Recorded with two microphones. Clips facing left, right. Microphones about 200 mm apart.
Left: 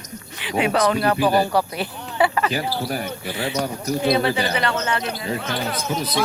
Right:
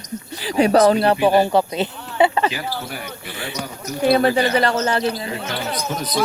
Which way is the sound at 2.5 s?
40° left (ahead or behind).